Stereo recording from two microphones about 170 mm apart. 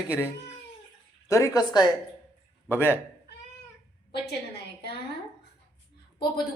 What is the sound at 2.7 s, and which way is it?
Speech, 15° left (ahead or behind).